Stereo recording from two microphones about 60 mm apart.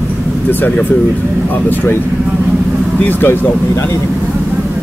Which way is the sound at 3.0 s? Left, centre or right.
Left.